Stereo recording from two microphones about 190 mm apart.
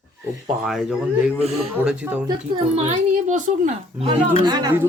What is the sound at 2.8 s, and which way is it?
A woman's voice, 35° right (ahead or behind).